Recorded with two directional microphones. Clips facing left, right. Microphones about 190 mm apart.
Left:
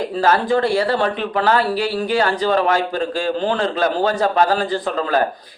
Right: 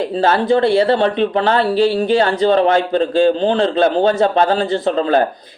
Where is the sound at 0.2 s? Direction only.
25° right (ahead or behind).